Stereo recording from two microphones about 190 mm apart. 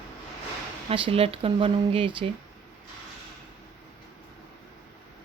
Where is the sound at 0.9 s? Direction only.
30° right (ahead or behind).